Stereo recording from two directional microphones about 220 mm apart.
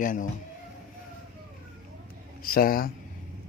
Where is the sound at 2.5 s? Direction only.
40° left (ahead or behind).